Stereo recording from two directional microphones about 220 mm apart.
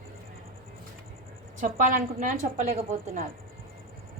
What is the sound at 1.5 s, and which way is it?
A woman's voice, 35° right (ahead or behind).